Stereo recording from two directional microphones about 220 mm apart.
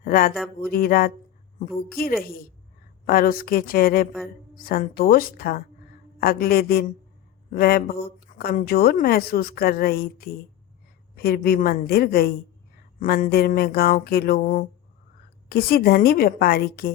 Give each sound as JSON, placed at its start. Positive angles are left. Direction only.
{"t": 0.0, "sound": "speech", "side_deg": 40}